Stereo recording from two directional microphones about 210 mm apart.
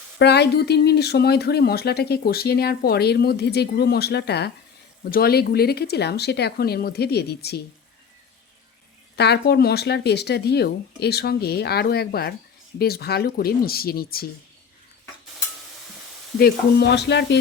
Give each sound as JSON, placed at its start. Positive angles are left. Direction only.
{"t": 0.2, "sound": "speech", "side_deg": 55}
{"t": 9.1, "sound": "speech", "side_deg": 50}
{"t": 16.4, "sound": "speech", "side_deg": 55}